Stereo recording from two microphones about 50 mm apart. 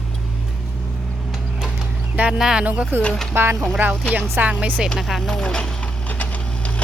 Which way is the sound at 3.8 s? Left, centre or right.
Right.